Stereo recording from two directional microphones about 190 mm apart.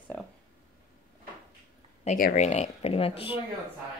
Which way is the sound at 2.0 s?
45° left (ahead or behind).